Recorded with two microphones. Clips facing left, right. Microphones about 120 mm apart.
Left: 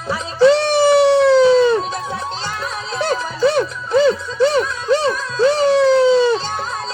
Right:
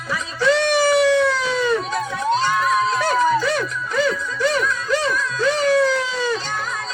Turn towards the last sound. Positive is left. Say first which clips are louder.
# left 7 dB
turn(degrees=25)  # may be behind; listen again after turning